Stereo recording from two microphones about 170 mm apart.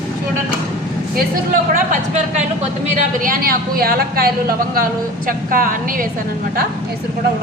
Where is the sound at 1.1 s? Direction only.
55° right (ahead or behind).